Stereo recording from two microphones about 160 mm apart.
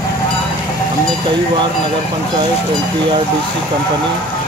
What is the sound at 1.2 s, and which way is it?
Speech, 30° right (ahead or behind).